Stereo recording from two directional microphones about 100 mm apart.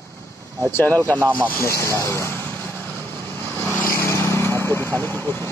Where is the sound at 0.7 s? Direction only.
20° left (ahead or behind).